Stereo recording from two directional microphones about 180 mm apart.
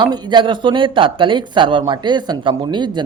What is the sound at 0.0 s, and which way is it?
Speech, 25° right (ahead or behind).